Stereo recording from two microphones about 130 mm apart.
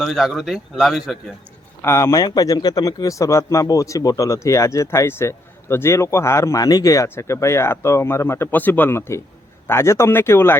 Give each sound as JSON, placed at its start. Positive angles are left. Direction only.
{"t": 0.0, "sound": "speech", "side_deg": 0}
{"t": 1.8, "sound": "a man's voice", "side_deg": 20}